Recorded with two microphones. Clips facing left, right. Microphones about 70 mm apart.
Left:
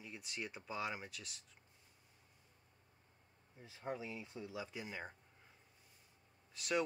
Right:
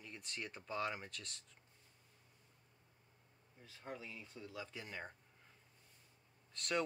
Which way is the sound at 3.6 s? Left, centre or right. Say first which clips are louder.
Left 5 dB; left.